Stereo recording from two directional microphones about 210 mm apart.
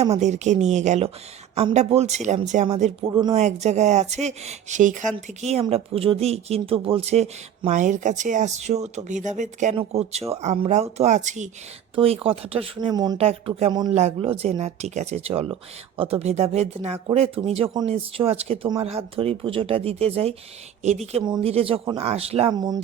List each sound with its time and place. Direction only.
0.2 s speech: 35° right (ahead or behind)
3.1 s speech: 20° right (ahead or behind)
3.4 s speech: 30° right (ahead or behind)